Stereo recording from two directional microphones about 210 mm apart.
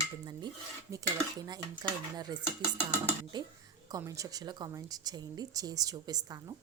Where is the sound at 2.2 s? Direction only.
20° right (ahead or behind).